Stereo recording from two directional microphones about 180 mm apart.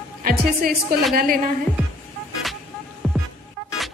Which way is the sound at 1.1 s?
55° right (ahead or behind).